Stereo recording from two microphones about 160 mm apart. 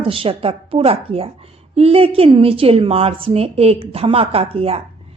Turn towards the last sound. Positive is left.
turn(degrees=-35)  # may be behind; listen again after turning